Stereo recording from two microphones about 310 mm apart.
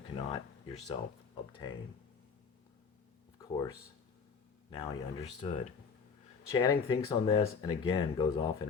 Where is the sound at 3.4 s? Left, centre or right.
Centre.